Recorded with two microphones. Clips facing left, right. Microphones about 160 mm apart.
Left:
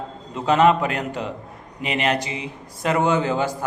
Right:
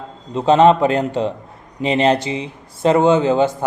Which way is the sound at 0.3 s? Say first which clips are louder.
Right 5 dB; 30° right (ahead or behind).